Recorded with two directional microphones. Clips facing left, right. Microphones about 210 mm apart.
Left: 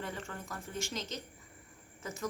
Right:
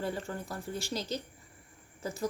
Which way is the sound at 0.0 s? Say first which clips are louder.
Right 6 dB; 35° right (ahead or behind).